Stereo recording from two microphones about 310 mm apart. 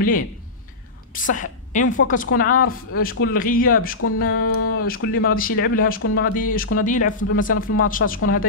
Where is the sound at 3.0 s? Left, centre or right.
Left.